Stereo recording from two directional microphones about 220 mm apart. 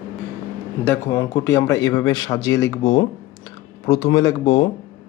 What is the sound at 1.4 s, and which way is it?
A man's voice, 15° left (ahead or behind).